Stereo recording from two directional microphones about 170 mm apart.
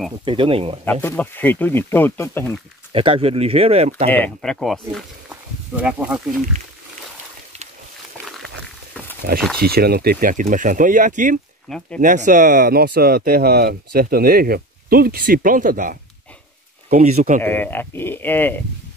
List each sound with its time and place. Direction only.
0.2 s speech: 30° right (ahead or behind)
1.0 s speech: 10° left (ahead or behind)
2.9 s speech: 35° right (ahead or behind)
4.1 s speech: 5° left (ahead or behind)
9.3 s speech: 65° right (ahead or behind); by 11.3 s 50° right (ahead or behind)
11.7 s speech: centre (ahead or behind)
12.0 s speech: 50° right (ahead or behind)
16.9 s speech: 40° right (ahead or behind)
17.4 s speech: 10° left (ahead or behind)